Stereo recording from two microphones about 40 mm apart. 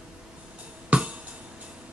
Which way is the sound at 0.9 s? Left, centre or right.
Right.